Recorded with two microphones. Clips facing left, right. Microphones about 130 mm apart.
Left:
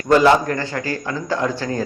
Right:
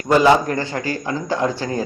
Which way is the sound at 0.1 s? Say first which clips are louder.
Even; 15° right (ahead or behind).